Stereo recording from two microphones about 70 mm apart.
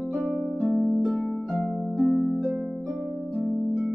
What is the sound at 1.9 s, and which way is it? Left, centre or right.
Harp, centre.